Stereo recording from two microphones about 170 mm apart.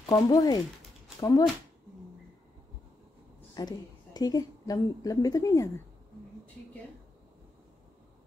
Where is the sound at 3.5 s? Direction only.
25° left (ahead or behind).